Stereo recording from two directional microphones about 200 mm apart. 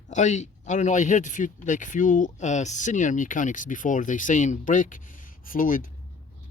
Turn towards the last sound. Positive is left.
turn(degrees=45)  # may be behind; listen again after turning